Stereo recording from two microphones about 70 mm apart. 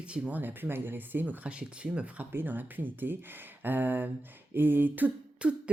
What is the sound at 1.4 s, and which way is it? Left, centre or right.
Speech, centre.